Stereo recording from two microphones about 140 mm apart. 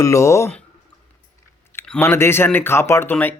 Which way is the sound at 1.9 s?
15° left (ahead or behind).